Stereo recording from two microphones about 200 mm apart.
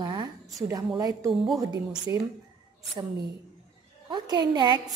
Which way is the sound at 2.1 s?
15° right (ahead or behind).